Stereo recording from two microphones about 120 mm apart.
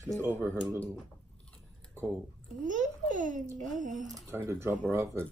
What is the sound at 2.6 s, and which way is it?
Speech, 90° right.